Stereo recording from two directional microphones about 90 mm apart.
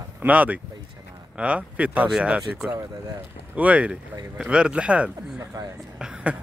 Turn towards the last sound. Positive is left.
turn(degrees=-10)  # may be behind; listen again after turning